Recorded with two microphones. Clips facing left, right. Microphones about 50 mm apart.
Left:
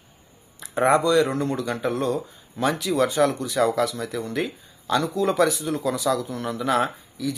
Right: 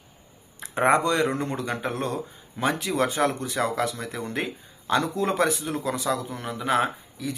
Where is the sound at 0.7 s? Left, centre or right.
Right.